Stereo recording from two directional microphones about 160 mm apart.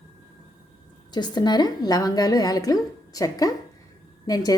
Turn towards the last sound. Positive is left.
turn(degrees=25)  # may be behind; listen again after turning